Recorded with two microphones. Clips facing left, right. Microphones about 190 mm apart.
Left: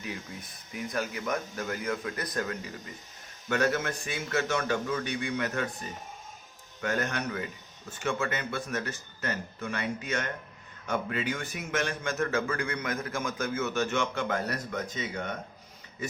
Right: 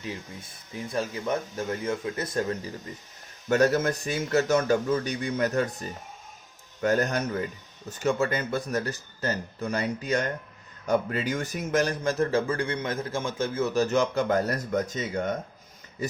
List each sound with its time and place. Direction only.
0.0 s speech: 30° right (ahead or behind)
3.5 s a man's voice: 40° right (ahead or behind)
6.8 s a man's voice: 40° right (ahead or behind)